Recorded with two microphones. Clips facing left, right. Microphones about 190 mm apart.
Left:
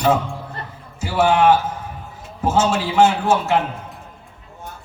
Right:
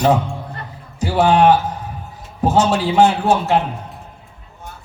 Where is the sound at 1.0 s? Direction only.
35° right (ahead or behind).